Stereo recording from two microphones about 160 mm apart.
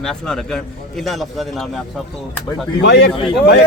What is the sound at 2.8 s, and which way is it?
Speech, 90° left.